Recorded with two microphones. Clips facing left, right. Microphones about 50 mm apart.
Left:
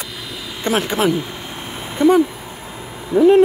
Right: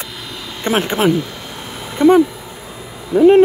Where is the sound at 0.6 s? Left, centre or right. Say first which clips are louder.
Right 2 dB; right.